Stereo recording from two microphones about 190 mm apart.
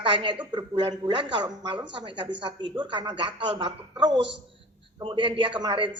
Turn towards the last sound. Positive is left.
turn(degrees=-25)  # may be behind; listen again after turning